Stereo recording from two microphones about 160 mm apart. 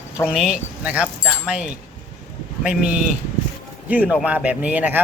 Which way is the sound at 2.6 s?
5° right (ahead or behind).